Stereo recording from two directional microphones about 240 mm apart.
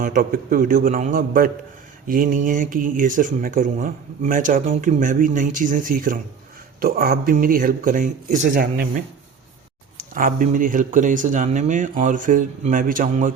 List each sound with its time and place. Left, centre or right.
0.0 s speech: right
10.2 s speech: right